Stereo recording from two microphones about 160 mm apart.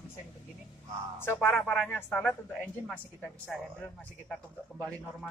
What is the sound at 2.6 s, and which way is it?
Speech, centre (ahead or behind).